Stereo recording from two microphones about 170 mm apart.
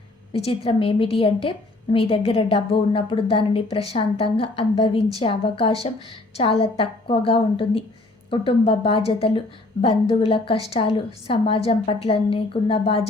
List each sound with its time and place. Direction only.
0.3 s a woman's voice: 35° left (ahead or behind)